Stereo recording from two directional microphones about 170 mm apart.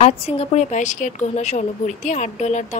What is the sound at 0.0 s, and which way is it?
A woman's voice, 40° left (ahead or behind).